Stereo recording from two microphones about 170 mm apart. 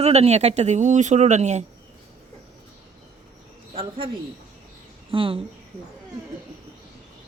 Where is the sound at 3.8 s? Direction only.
30° right (ahead or behind).